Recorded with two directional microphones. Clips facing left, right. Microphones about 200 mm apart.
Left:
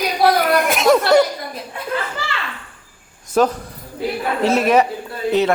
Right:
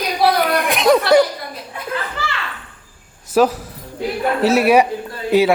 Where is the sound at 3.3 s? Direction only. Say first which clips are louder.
Right 2 dB; 10° right (ahead or behind).